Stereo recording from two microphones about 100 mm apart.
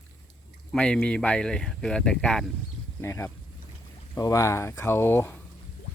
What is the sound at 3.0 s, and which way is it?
Speech, 25° left (ahead or behind).